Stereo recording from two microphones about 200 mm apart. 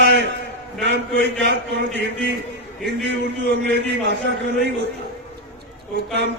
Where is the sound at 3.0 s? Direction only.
65° right (ahead or behind).